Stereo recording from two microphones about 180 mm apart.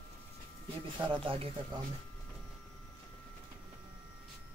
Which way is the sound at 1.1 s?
30° right (ahead or behind).